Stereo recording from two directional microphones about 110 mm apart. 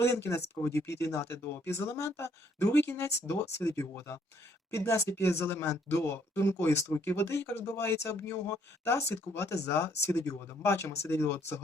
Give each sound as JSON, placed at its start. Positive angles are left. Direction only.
{"t": 0.0, "sound": "speech", "side_deg": 25}